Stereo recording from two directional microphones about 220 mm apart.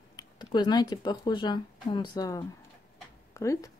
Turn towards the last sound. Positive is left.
turn(degrees=15)  # may be behind; listen again after turning